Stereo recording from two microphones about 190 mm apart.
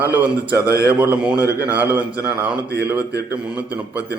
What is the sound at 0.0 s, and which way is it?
Speech, 10° right (ahead or behind).